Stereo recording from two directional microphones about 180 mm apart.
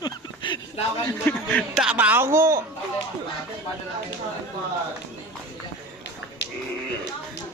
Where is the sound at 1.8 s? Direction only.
5° right (ahead or behind).